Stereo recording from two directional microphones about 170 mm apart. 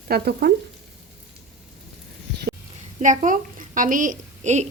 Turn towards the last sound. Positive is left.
turn(degrees=-45)  # may be behind; listen again after turning